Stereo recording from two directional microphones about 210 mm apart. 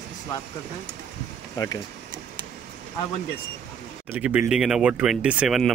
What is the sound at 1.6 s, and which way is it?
Speech, 15° left (ahead or behind).